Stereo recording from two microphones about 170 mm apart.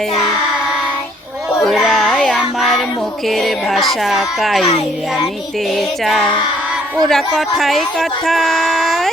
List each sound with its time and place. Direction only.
1.6 s child singing: centre (ahead or behind)
3.2 s speech: centre (ahead or behind)
5.7 s speech: centre (ahead or behind)